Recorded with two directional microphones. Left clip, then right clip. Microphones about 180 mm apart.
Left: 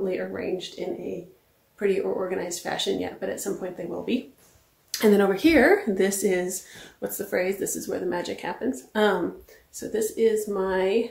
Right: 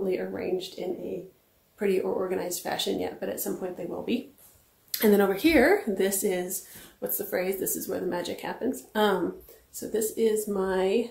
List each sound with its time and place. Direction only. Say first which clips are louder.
0.0 s speech: left 1 dB; 10° right (ahead or behind)
1.8 s speech: left 2 dB; 10° right (ahead or behind)
9.8 s speech: left 3 dB; 10° right (ahead or behind)